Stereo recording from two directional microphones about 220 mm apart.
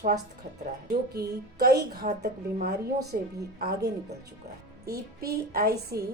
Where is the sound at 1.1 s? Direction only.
45° right (ahead or behind).